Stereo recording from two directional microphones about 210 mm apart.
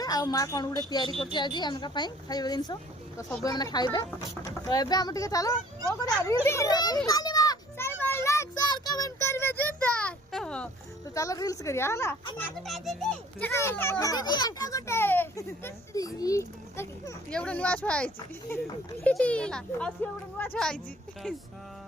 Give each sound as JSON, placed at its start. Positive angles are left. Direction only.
{"t": 0.0, "sound": "a child's voice", "side_deg": 20}
{"t": 7.1, "sound": "children playing", "side_deg": 15}
{"t": 11.1, "sound": "a child's voice", "side_deg": 15}
{"t": 12.4, "sound": "a child's voice", "side_deg": 0}